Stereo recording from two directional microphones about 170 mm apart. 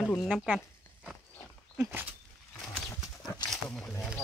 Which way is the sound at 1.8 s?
15° right (ahead or behind).